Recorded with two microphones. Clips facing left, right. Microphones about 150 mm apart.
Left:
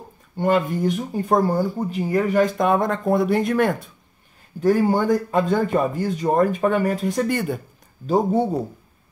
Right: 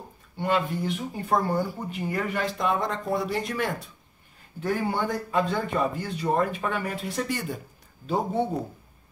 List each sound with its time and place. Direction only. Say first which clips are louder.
0.4 s speech: left 6 dB; 45° left (ahead or behind)
4.6 s speech: left 9 dB; 40° left (ahead or behind)
8.1 s speech: left 7 dB; 40° left (ahead or behind)